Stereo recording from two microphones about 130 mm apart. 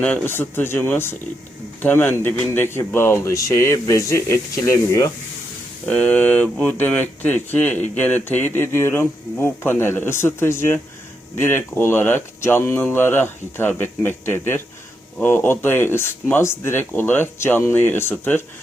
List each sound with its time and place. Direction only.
0.0 s speech: 15° left (ahead or behind)
5.9 s speech: 10° left (ahead or behind)